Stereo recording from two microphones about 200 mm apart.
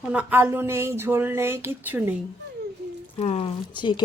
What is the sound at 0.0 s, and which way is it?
Speech, 5° right (ahead or behind).